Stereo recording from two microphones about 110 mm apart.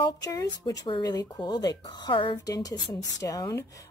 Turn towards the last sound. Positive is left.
turn(degrees=30)  # may be behind; listen again after turning